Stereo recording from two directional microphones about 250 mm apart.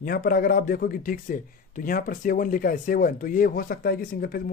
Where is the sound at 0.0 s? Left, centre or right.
Left.